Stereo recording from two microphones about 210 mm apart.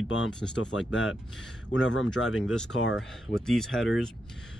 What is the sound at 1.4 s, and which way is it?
Speech, 60° left (ahead or behind).